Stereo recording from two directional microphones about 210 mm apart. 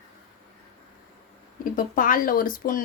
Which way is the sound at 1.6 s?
40° left (ahead or behind).